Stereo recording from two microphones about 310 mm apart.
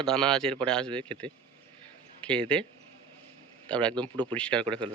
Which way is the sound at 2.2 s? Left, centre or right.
Centre.